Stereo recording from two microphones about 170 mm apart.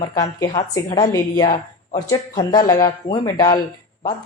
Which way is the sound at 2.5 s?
20° left (ahead or behind).